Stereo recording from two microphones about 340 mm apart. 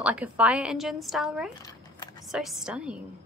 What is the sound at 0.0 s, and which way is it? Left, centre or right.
A woman's voice, centre.